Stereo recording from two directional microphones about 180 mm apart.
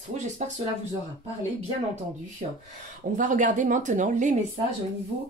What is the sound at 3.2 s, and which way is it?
A woman's voice, 45° right (ahead or behind).